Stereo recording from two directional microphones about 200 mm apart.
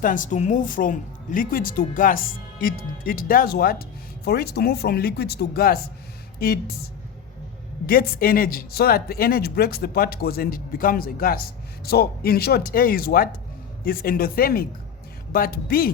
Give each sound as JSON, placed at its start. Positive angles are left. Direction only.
{"t": 0.0, "sound": "speech", "side_deg": 40}
{"t": 7.9, "sound": "speech", "side_deg": 45}